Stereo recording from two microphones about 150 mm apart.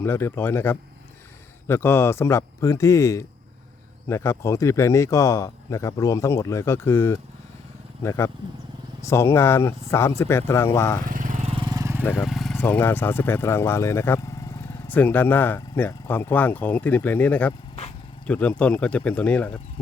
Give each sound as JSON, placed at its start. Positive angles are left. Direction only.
{"t": 0.0, "sound": "speech", "side_deg": 15}
{"t": 11.0, "sound": "lawn mower", "side_deg": -60}
{"t": 11.6, "sound": "vehicle", "side_deg": -25}
{"t": 12.2, "sound": "vehicle", "side_deg": 0}
{"t": 12.5, "sound": "speech", "side_deg": 10}